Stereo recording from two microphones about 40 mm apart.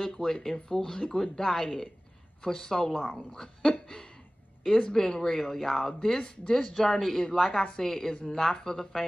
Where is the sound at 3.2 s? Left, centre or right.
Centre.